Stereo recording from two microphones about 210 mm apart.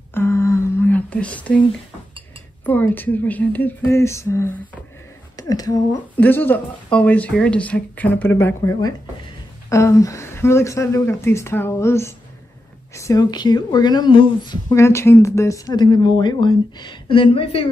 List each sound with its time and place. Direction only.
0.1 s whispering: 10° left (ahead or behind)
2.6 s speech: 10° left (ahead or behind); by 17.6 s 25° left (ahead or behind)